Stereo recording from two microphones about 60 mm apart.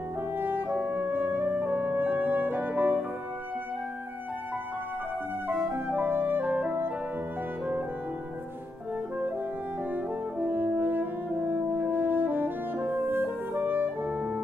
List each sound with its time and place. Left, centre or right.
0.4 s french horn: right
5.5 s music: right
9.9 s french horn: right